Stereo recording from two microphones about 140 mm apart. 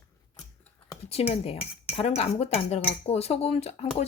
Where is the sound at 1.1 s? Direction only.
45° left (ahead or behind).